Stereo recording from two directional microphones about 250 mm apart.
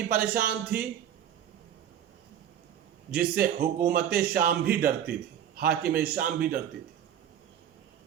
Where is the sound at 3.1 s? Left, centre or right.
Right.